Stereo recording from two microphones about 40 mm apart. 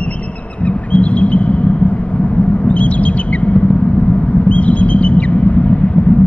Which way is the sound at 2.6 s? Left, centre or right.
Left.